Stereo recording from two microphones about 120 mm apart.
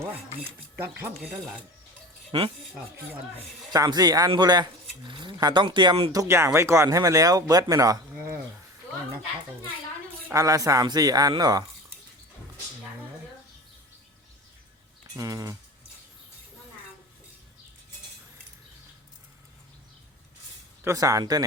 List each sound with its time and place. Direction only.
0.4 s speech: 15° right (ahead or behind)
2.3 s speech: 45° right (ahead or behind)
3.7 s speech: 35° right (ahead or behind)
10.3 s speech: 30° right (ahead or behind)
15.1 s speech: 30° right (ahead or behind)
20.8 s speech: 30° right (ahead or behind)